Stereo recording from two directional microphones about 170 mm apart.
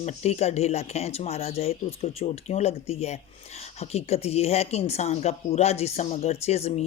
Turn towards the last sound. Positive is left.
turn(degrees=40)  # may be behind; listen again after turning